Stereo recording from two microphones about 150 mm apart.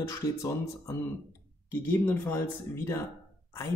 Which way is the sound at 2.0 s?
15° left (ahead or behind).